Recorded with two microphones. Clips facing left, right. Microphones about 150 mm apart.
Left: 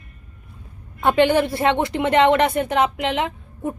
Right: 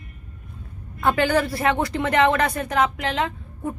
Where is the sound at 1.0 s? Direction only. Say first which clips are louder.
Left 4 dB; 25° left (ahead or behind).